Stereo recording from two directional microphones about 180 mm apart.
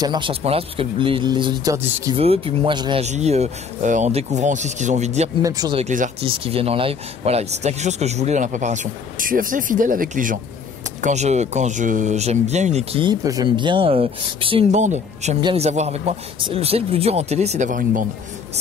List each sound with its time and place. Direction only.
0.0 s speech: 25° right (ahead or behind)
1.8 s speech: 10° right (ahead or behind)
2.1 s speech: 30° right (ahead or behind)
3.0 s speech: 40° right (ahead or behind)
5.4 s speech: 20° right (ahead or behind)
5.8 s speech: 45° right (ahead or behind)
6.2 s speech: 30° right (ahead or behind); by 18.0 s 45° right (ahead or behind)